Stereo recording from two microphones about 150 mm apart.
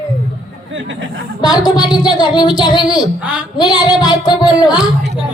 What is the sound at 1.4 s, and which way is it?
Speech, 25° left (ahead or behind).